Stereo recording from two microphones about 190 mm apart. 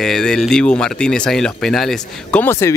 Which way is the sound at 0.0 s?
5° left (ahead or behind).